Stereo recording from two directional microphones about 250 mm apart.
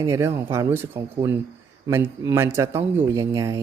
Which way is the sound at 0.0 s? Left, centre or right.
Centre.